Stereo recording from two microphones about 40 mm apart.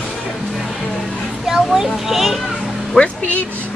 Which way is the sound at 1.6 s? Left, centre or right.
Centre.